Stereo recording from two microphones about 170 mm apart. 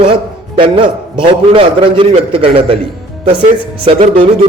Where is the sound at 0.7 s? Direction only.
30° right (ahead or behind).